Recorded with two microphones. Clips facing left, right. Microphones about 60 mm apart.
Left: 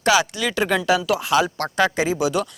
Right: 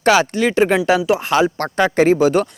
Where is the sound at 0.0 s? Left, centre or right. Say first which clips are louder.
Right 5 dB; right.